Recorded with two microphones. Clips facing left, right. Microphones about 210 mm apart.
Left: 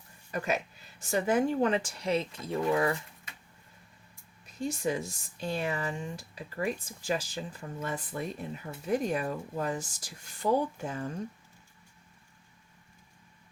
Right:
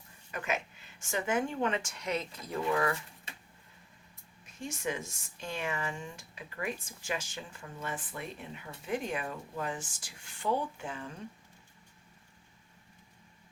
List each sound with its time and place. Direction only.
0.3 s speech: 35° left (ahead or behind)
4.4 s speech: 35° left (ahead or behind)